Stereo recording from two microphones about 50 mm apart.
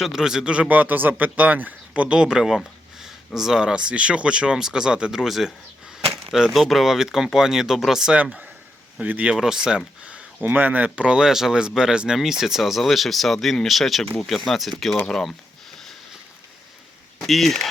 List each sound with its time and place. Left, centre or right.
0.0 s speech: centre
0.8 s speech: right; by 8.1 s centre
9.0 s speech: right
9.3 s speech: centre
10.1 s speech: right; by 14.9 s centre
15.0 s a sound: centre
17.2 s speech: centre